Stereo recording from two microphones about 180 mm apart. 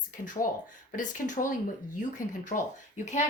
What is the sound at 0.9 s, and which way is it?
Speech, 45° left (ahead or behind).